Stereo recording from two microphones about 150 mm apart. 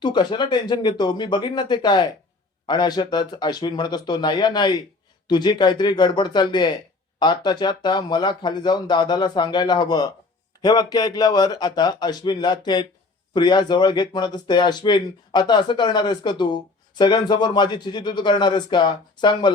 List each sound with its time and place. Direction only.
0.0 s speech: 30° left (ahead or behind)